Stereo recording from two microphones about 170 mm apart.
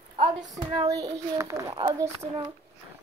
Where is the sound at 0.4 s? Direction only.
20° right (ahead or behind).